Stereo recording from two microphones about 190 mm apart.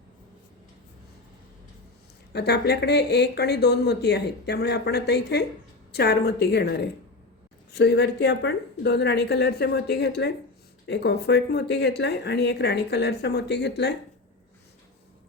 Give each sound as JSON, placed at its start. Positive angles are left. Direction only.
{"t": 2.3, "sound": "speech", "side_deg": 60}